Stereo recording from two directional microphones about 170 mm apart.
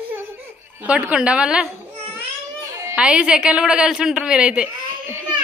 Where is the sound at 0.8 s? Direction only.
5° right (ahead or behind).